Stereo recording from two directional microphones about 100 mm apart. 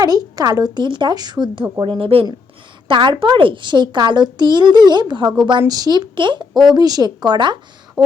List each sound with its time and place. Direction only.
0.0 s a woman's voice: 40° right (ahead or behind)
1.8 s speech: 60° right (ahead or behind)
2.8 s a woman's voice: 55° right (ahead or behind)